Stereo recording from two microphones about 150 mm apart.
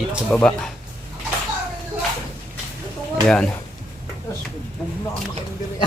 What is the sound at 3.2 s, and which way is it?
Speech, 5° left (ahead or behind).